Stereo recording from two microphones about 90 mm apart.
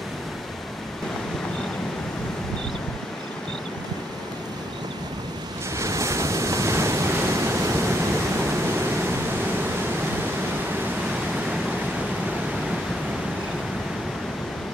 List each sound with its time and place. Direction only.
5.8 s waves: 35° right (ahead or behind)